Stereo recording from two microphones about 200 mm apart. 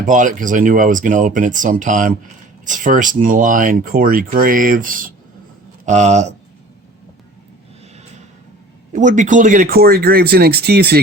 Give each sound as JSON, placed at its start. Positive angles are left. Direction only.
{"t": 0.0, "sound": "speech", "side_deg": -40}
{"t": 8.9, "sound": "speech", "side_deg": -40}